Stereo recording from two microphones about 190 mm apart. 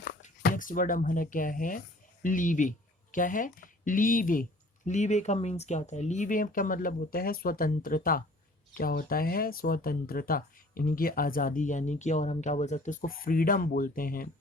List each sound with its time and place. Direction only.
0.4 s speech: 45° left (ahead or behind)